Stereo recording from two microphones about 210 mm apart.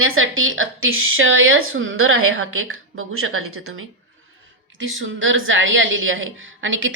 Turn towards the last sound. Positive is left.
turn(degrees=-65)  # may be behind; listen again after turning